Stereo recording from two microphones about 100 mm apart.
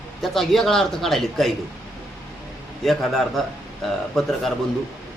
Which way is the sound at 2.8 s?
5° left (ahead or behind).